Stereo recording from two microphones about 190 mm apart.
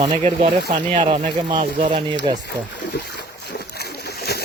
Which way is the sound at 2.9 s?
55° left (ahead or behind).